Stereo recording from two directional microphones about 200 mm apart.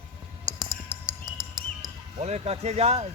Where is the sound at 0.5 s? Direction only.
20° right (ahead or behind).